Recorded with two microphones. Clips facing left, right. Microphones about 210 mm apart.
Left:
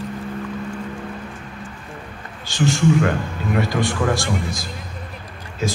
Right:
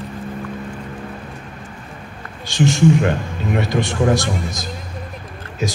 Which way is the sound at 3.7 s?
20° right (ahead or behind).